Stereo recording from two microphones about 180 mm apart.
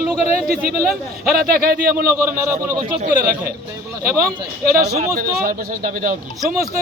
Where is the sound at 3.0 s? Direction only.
55° right (ahead or behind).